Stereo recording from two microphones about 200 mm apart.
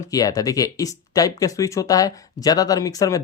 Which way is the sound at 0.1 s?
15° left (ahead or behind).